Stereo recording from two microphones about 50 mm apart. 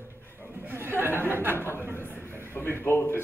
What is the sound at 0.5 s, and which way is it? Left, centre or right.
A man's voice, right.